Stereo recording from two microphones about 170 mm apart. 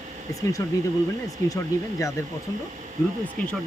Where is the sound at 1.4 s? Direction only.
20° left (ahead or behind).